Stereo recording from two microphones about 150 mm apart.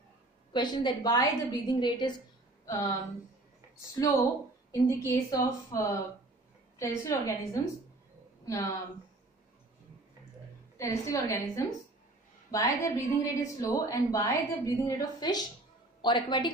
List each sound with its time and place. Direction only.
0.5 s a woman's voice: 30° left (ahead or behind)
4.8 s a woman's voice: 20° left (ahead or behind)
10.8 s a woman's voice: 20° left (ahead or behind)